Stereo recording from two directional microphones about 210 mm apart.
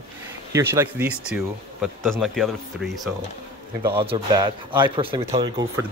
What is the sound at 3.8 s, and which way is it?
Speech, 10° right (ahead or behind).